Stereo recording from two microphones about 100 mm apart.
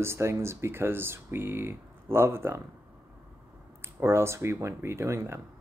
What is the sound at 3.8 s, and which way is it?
Speech, 25° right (ahead or behind).